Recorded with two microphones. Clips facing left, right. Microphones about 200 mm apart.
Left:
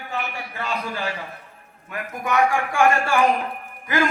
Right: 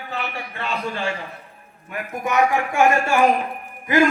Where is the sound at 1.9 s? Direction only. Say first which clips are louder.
Right 1 dB; 20° right (ahead or behind).